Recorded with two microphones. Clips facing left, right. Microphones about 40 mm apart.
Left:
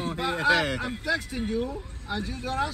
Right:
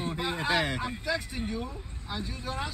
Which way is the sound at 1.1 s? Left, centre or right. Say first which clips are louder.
Left 5 dB; centre.